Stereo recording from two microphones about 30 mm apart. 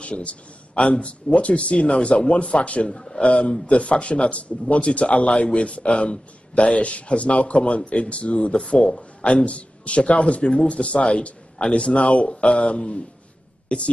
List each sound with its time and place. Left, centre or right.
0.0 s a man's voice: left
2.6 s a man's voice: left
2.9 s speech: left
3.3 s speech: left
8.6 s speech: centre
9.2 s speech: left